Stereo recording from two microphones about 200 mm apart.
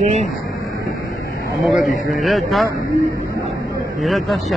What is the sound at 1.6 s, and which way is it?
A man's voice, centre (ahead or behind).